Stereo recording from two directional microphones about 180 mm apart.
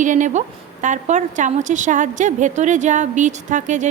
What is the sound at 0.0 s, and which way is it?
A woman's voice, 45° right (ahead or behind).